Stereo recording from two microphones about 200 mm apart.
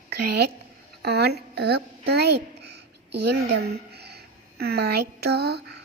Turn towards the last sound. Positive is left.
turn(degrees=-55)  # may be behind; listen again after turning